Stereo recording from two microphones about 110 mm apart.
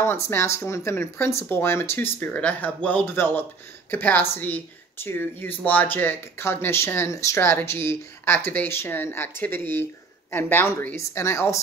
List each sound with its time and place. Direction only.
0.0 s speech: 20° left (ahead or behind)